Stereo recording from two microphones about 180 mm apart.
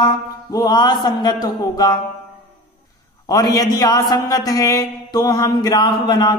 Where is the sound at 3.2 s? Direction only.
20° left (ahead or behind).